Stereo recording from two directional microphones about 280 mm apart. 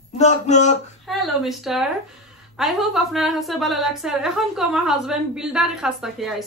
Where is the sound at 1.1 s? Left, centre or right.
Centre.